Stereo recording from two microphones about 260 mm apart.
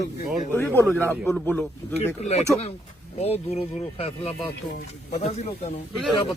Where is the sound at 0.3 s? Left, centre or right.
Centre.